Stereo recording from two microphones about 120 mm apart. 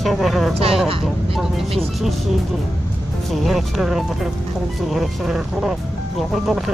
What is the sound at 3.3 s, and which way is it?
Speech, centre (ahead or behind).